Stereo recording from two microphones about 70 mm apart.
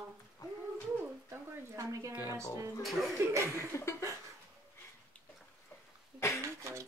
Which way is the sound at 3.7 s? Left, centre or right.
Left.